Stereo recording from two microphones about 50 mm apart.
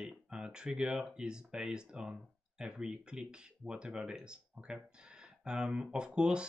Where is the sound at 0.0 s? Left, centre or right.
Centre.